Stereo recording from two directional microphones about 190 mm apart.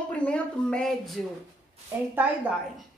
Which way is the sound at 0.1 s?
5° left (ahead or behind).